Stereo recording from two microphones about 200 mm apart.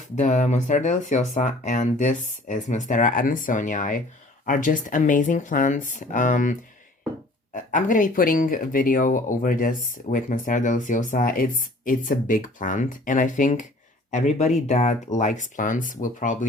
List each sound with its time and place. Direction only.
0.2 s speech: 35° left (ahead or behind)